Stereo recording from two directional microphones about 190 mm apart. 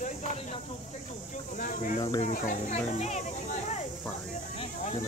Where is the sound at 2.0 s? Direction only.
25° left (ahead or behind).